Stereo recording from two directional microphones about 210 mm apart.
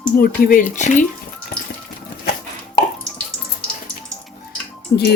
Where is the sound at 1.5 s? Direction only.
40° left (ahead or behind).